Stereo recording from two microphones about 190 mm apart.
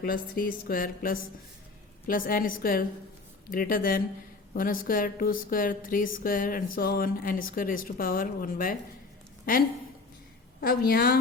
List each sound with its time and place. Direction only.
0.0 s speech: 50° left (ahead or behind)
10.6 s speech: 50° left (ahead or behind)